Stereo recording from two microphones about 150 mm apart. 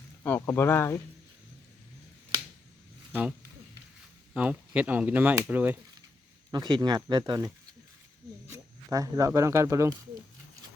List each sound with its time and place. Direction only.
0.2 s speech: 15° left (ahead or behind)
3.1 s speech: 10° right (ahead or behind)
4.4 s speech: 10° right (ahead or behind)
6.5 s speech: 30° right (ahead or behind)